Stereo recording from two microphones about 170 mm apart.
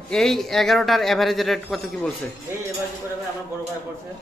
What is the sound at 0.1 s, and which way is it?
A man's voice, centre (ahead or behind).